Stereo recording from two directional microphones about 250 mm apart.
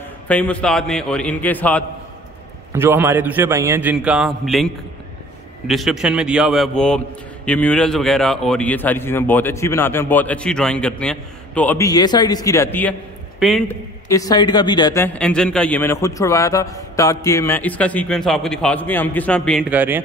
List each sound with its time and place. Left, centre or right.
0.3 s a man's voice: centre
2.7 s a man's voice: centre
14.0 s a man's voice: centre